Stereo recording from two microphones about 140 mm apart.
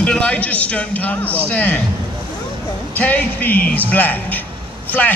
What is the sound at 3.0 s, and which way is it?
Speech, 10° left (ahead or behind).